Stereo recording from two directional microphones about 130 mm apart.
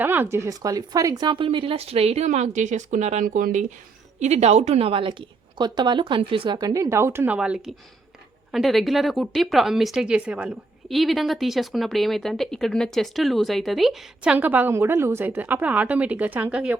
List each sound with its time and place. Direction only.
0.0 s speech: 15° right (ahead or behind); by 3.7 s 80° right
4.2 s a woman's voice: 60° right (ahead or behind); by 7.3 s 20° right (ahead or behind)
7.3 s speech: 10° right (ahead or behind)